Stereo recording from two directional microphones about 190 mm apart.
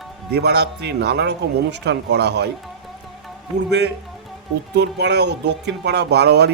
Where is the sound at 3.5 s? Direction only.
60° right (ahead or behind).